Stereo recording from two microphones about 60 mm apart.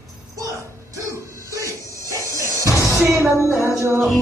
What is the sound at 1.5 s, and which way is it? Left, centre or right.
Music, right.